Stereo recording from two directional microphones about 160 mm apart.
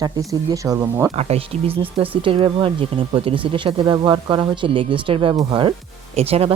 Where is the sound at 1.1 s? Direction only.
40° right (ahead or behind).